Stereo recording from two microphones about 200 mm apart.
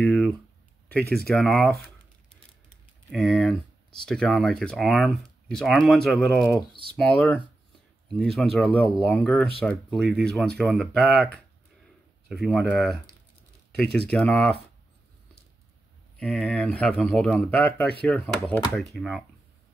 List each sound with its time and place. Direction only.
0.0 s a sound: 5° left (ahead or behind)
0.8 s speech: 5° left (ahead or behind)
3.1 s speech: centre (ahead or behind)
6.7 s speech: 25° right (ahead or behind)
7.0 s speech: 5° left (ahead or behind)
12.3 s speech: centre (ahead or behind)
14.1 s speech: 5° left (ahead or behind)
16.2 s speech: centre (ahead or behind)